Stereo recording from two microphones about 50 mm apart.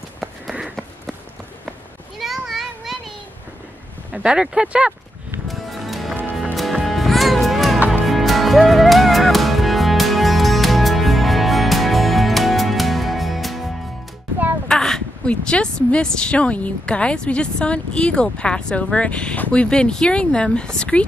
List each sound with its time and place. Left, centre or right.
0.2 s run: centre
2.1 s child singing: centre
4.1 s speech: centre
5.5 s music: centre
14.7 s a sound: centre
15.2 s a woman's voice: left